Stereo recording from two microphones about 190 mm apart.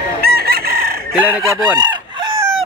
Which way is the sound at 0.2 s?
55° right (ahead or behind).